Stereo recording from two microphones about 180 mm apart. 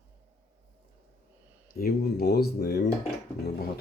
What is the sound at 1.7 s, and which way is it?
Speech, 60° left (ahead or behind).